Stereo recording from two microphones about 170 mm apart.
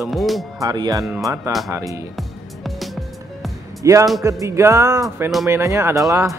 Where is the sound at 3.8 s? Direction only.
20° right (ahead or behind).